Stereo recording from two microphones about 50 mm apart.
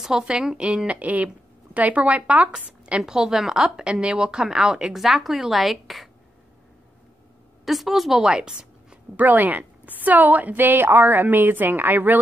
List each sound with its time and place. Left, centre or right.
0.3 s a woman's voice: centre
0.8 s speech: right
3.0 s a woman's voice: centre
4.9 s a woman's voice: centre
7.6 s a woman's voice: centre
8.3 s a sound: centre
9.1 s a woman's voice: right